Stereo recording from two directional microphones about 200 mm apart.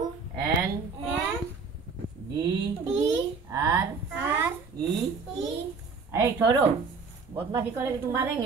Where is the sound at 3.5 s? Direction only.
15° right (ahead or behind).